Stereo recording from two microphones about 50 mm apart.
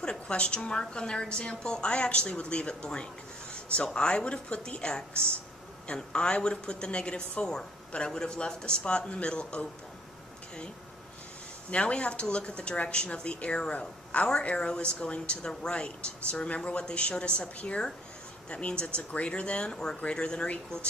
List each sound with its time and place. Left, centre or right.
0.0 s a woman's voice: centre
3.5 s a sound: left
3.8 s a woman's voice: centre
11.7 s a woman's voice: left